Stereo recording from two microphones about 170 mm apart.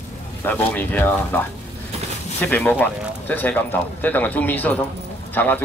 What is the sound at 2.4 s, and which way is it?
Speech, 10° left (ahead or behind).